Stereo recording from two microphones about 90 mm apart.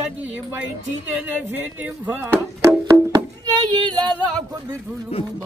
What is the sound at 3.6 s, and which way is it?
Female singing, 50° right (ahead or behind).